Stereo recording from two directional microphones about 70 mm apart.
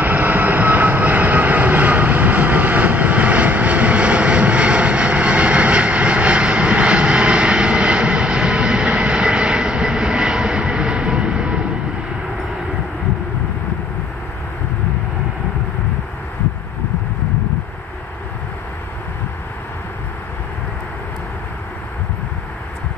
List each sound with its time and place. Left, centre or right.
0.0 s vehicle: right